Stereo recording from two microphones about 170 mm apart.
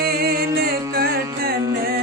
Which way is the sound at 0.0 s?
60° right (ahead or behind).